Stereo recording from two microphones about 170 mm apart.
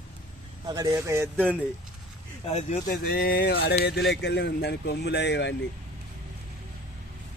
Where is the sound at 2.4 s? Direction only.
40° left (ahead or behind).